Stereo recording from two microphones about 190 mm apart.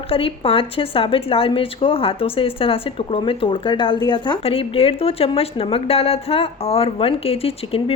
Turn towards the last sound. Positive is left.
turn(degrees=30)  # may be behind; listen again after turning